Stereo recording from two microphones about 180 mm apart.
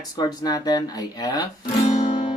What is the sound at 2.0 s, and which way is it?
Music, 30° left (ahead or behind).